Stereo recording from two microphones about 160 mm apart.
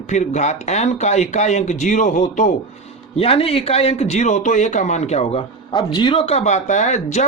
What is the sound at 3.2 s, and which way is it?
Speech, 35° left (ahead or behind).